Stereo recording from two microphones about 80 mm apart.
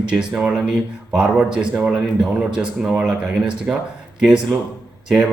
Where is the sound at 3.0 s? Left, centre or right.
Centre.